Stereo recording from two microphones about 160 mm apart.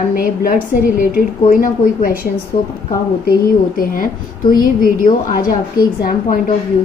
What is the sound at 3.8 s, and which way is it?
A woman's voice, 60° left (ahead or behind).